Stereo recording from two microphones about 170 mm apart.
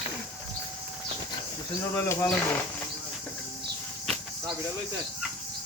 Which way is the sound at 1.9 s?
15° left (ahead or behind).